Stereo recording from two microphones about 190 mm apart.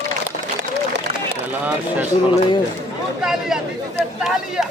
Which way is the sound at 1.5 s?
10° right (ahead or behind).